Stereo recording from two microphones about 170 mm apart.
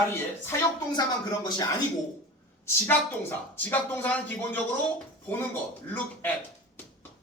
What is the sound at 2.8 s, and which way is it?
Speech, 10° left (ahead or behind).